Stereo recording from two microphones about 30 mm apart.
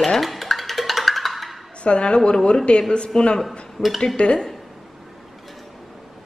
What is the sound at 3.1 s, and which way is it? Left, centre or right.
Speech, left.